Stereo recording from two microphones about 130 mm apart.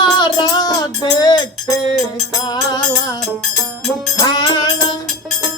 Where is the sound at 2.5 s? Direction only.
30° left (ahead or behind).